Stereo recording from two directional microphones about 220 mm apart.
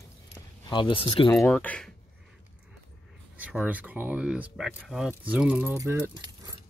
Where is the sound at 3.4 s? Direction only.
5° right (ahead or behind).